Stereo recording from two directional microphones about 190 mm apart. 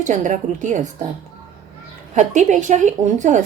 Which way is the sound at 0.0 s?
40° right (ahead or behind).